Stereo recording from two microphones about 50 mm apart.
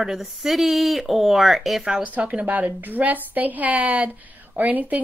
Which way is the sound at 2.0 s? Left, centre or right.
Right.